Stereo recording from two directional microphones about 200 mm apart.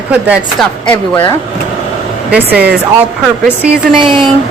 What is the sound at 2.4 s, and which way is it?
Speech, 50° right (ahead or behind).